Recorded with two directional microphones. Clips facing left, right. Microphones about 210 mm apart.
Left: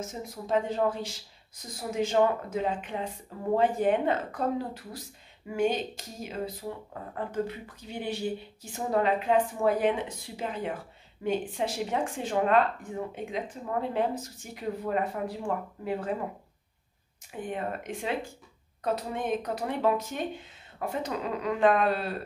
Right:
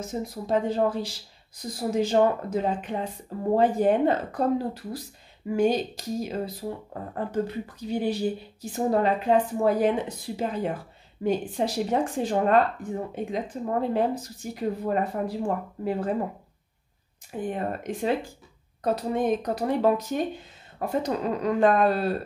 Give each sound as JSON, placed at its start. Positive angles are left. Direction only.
{"t": 0.0, "sound": "speech", "side_deg": -35}
{"t": 17.3, "sound": "speech", "side_deg": -35}